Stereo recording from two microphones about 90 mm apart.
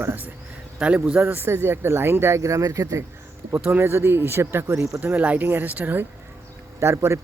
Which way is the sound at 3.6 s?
20° right (ahead or behind).